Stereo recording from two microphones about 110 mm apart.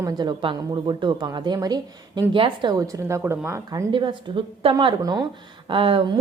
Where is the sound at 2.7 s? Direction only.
30° right (ahead or behind).